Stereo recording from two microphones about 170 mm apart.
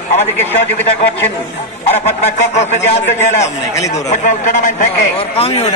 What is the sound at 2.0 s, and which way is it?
Speech, 40° left (ahead or behind).